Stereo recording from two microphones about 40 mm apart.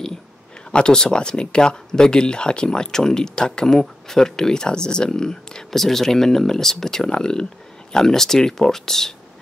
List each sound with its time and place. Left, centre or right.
0.7 s speech: left